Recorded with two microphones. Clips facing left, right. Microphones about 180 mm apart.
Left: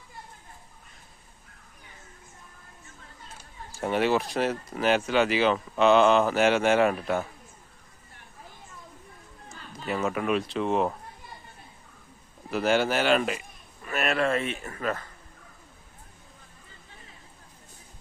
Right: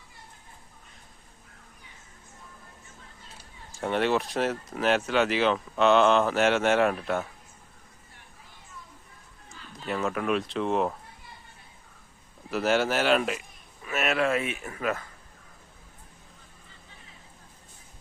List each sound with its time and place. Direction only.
3.8 s speech: 5° left (ahead or behind)
9.8 s speech: centre (ahead or behind)
12.5 s speech: centre (ahead or behind)